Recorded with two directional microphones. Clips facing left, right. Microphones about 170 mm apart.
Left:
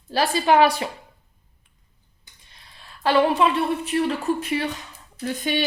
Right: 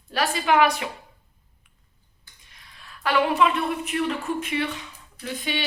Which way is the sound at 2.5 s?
30° left (ahead or behind).